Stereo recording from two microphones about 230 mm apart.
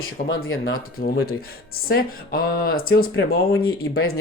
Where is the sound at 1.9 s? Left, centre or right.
Left.